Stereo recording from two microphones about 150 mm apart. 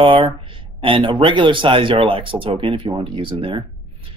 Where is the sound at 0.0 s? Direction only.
35° right (ahead or behind).